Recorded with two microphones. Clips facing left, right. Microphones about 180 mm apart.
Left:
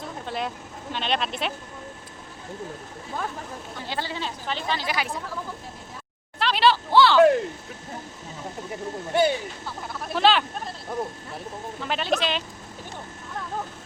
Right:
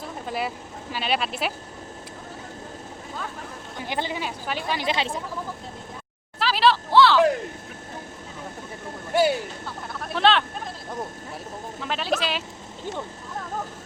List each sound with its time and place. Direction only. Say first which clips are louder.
0.3 s speech: right 2 dB; 5° right (ahead or behind)
3.8 s speech: right 3 dB; 15° right (ahead or behind)
4.9 s speech: right 3 dB; 25° right (ahead or behind)
6.4 s a sound: even; centre (ahead or behind)
9.1 s a sound: right 1 dB; 5° right (ahead or behind)
11.8 s speech: left 1 dB; centre (ahead or behind)